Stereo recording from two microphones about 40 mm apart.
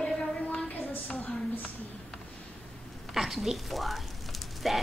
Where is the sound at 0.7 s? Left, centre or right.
Left.